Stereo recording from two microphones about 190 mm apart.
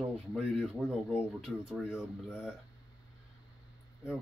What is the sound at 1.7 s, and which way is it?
Speech, 5° right (ahead or behind).